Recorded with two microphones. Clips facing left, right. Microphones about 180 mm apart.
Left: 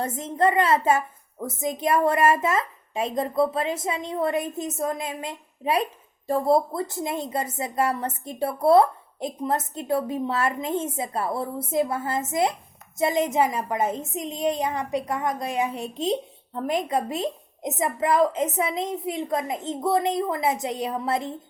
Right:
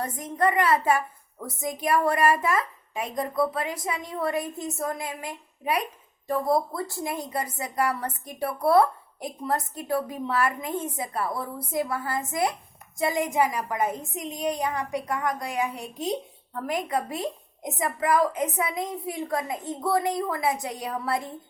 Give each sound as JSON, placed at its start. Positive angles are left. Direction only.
{"t": 0.0, "sound": "a woman's voice", "side_deg": 25}